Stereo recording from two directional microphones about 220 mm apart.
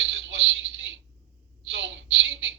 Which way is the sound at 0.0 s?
50° right (ahead or behind).